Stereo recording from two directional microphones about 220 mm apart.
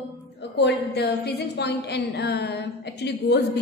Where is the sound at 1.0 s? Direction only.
50° left (ahead or behind).